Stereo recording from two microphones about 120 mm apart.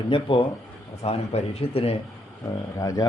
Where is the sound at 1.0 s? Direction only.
60° left (ahead or behind).